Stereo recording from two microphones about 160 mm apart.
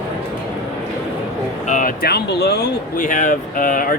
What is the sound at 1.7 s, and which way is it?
Speech, 60° left (ahead or behind).